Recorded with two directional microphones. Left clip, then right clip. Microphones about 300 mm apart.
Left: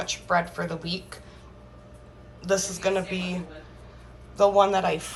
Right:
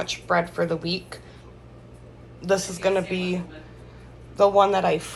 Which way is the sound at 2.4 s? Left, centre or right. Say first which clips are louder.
Right 2 dB; centre.